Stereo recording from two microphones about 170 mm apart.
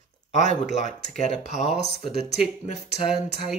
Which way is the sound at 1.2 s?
40° left (ahead or behind).